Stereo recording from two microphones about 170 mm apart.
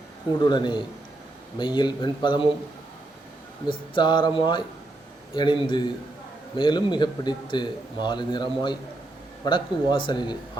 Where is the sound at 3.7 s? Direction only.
30° left (ahead or behind).